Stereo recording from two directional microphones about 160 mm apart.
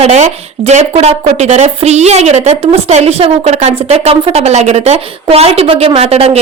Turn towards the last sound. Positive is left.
turn(degrees=-40)  # may be behind; listen again after turning